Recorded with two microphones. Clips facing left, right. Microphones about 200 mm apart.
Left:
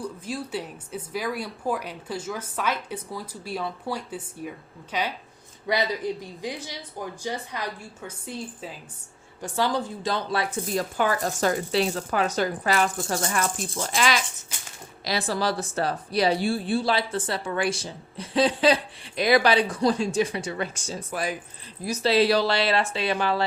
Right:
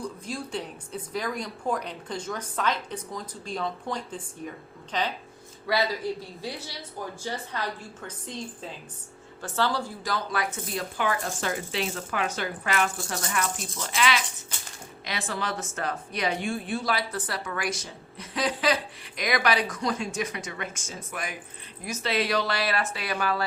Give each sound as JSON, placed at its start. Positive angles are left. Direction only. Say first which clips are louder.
{"t": 0.0, "sound": "speech", "louder": "left 2 dB", "side_deg": 5}